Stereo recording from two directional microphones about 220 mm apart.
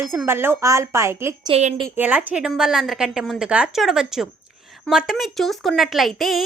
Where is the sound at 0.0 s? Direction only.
5° right (ahead or behind).